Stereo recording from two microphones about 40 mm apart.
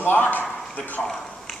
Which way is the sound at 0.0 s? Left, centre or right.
Left.